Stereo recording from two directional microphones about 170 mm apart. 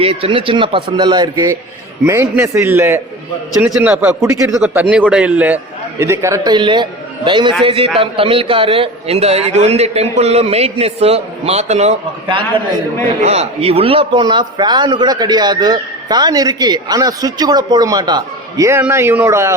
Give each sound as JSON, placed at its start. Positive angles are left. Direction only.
{"t": 0.0, "sound": "a man's voice", "side_deg": -35}
{"t": 13.2, "sound": "a man's voice", "side_deg": -40}